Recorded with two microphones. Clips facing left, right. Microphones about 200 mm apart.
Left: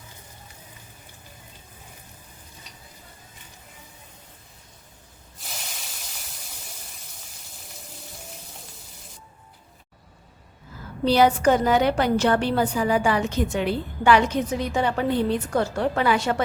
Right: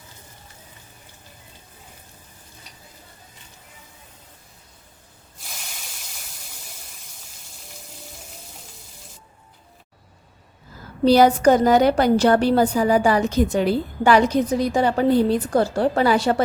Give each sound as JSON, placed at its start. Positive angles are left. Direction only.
{"t": 11.0, "sound": "a woman's voice", "side_deg": -40}